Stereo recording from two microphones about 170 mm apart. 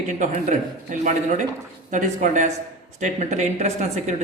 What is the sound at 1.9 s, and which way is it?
Speech, 50° right (ahead or behind).